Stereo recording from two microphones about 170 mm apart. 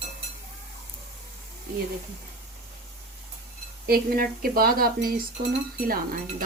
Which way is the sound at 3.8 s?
60° right (ahead or behind).